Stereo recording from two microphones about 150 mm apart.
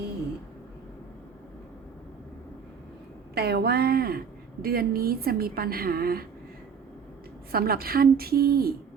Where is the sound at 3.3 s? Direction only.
90° right.